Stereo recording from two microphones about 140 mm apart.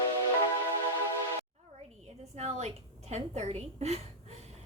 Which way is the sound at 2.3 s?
50° right (ahead or behind).